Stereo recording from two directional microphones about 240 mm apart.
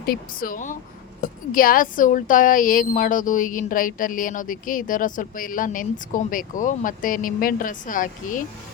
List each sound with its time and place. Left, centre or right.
0.0 s a woman's voice: left